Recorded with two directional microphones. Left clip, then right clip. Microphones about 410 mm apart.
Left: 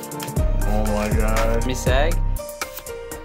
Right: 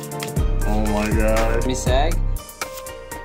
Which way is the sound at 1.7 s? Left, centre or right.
Centre.